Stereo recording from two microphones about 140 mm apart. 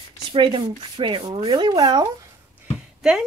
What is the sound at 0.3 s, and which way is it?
Speech, 35° right (ahead or behind).